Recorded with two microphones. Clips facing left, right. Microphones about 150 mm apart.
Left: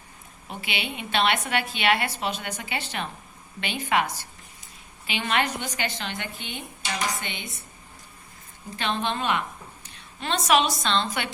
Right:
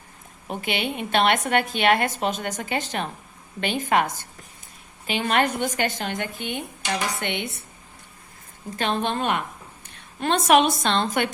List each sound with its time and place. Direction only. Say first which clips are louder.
0.4 s a woman's voice: right 6 dB; 50° right (ahead or behind)
7.2 s speech: right 8 dB; 65° right (ahead or behind)
8.7 s a woman's voice: right 3 dB; 45° right (ahead or behind)